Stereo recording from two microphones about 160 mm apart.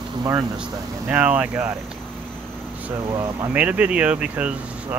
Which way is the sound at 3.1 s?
25° right (ahead or behind).